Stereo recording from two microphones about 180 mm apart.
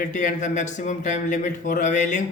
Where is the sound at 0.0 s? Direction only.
45° left (ahead or behind).